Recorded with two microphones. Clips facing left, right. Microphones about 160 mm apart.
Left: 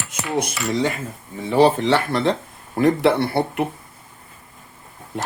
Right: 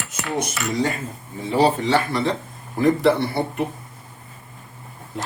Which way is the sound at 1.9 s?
65° left (ahead or behind).